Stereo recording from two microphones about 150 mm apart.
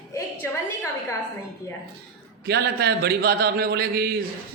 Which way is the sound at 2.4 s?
90° right.